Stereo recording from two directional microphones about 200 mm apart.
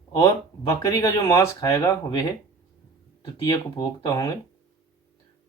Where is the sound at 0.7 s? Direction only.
15° left (ahead or behind).